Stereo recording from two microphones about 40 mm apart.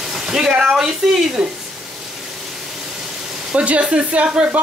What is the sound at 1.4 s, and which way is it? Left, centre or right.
Speech, right.